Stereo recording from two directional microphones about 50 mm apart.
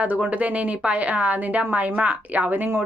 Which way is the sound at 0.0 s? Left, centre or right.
Right.